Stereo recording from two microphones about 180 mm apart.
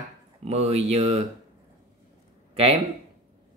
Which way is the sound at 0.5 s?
35° right (ahead or behind).